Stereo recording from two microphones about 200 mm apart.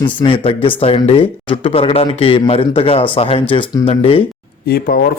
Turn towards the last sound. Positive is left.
turn(degrees=50)  # may be behind; listen again after turning